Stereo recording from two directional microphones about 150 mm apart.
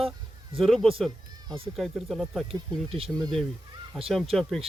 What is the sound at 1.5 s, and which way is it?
Speech, 35° right (ahead or behind).